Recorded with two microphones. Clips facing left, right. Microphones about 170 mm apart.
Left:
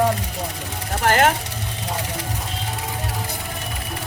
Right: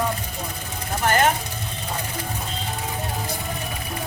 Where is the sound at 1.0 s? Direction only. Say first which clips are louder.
Left 2 dB; 85° left.